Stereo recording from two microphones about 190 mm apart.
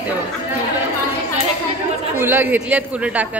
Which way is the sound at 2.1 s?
10° right (ahead or behind).